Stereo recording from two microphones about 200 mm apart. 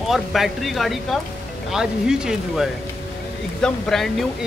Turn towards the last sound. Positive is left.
turn(degrees=0)  # may be behind; listen again after turning